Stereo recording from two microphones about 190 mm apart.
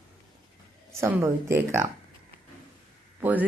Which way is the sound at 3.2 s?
10° right (ahead or behind).